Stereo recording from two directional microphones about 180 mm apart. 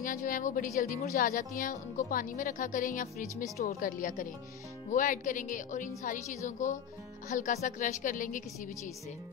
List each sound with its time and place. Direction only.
0.0 s a woman's voice: 50° left (ahead or behind)